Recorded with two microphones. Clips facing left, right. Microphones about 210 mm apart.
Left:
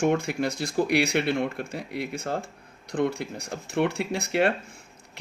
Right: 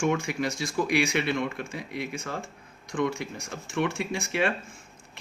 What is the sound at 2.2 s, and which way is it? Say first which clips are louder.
Speech: left 5 dB; 35° left (ahead or behind).